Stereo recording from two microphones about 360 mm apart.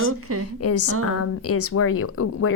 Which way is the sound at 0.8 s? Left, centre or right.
Right.